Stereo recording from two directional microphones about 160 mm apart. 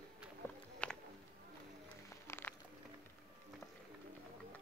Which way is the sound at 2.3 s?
15° left (ahead or behind).